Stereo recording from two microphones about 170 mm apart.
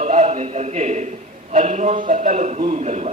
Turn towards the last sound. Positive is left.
turn(degrees=-40)  # may be behind; listen again after turning